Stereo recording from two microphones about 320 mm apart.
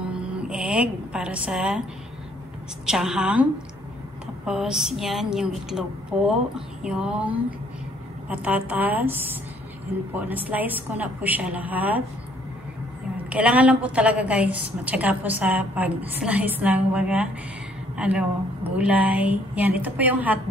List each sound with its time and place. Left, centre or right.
0.1 s speech: centre
2.9 s a woman's voice: centre
4.5 s a woman's voice: centre
13.3 s a woman's voice: centre